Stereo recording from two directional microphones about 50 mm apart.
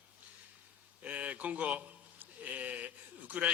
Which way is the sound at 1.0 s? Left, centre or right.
Right.